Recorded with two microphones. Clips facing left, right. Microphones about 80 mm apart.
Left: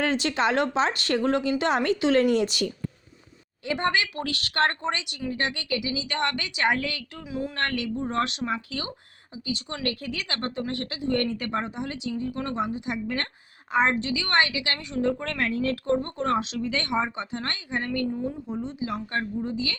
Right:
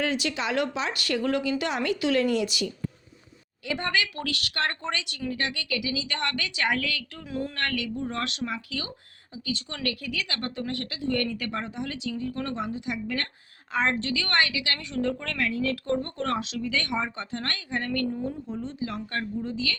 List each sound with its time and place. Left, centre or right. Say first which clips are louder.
0.0 s a woman's voice: left 4 dB; left
3.7 s a woman's voice: left 3 dB; left
4.8 s a woman's voice: left 2 dB; left
7.3 s speech: left 1 dB; centre
7.5 s a woman's voice: left 2 dB; left
13.7 s a woman's voice: left 3 dB; centre